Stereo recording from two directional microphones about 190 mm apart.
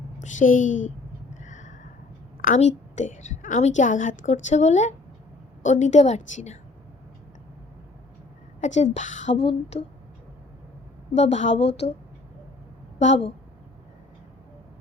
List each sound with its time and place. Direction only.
0.2 s a woman's voice: 40° left (ahead or behind)
0.9 s a sound: 40° left (ahead or behind)
2.4 s a woman's voice: 40° left (ahead or behind)
8.6 s a woman's voice: 40° left (ahead or behind)
11.1 s a woman's voice: 35° left (ahead or behind)
13.0 s a woman's voice: 35° left (ahead or behind)